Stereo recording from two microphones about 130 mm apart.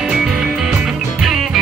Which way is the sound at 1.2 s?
Centre (ahead or behind).